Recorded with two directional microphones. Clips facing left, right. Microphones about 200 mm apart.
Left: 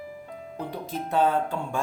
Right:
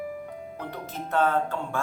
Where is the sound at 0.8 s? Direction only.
15° left (ahead or behind).